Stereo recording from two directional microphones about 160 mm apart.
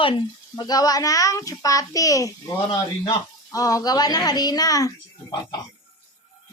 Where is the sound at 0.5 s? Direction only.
25° left (ahead or behind).